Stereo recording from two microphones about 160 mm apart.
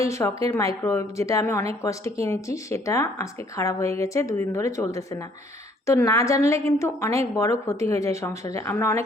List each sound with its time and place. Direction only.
0.0 s a woman's voice: 20° left (ahead or behind)